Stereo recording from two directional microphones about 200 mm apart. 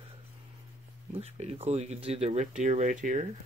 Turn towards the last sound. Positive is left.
turn(degrees=-40)  # may be behind; listen again after turning